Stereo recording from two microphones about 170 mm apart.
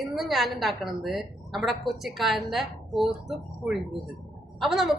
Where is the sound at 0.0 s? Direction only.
Centre (ahead or behind).